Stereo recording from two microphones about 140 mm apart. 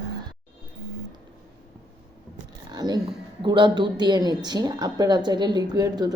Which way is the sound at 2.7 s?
30° right (ahead or behind).